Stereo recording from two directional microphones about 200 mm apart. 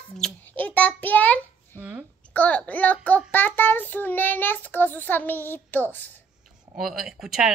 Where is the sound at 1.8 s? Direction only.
10° right (ahead or behind).